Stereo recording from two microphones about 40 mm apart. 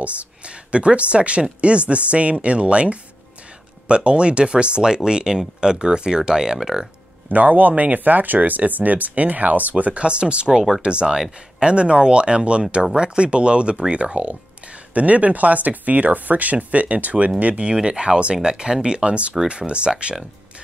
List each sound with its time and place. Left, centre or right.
0.0 s speech: right; by 6.9 s centre
7.2 s speech: right
17.6 s speech: right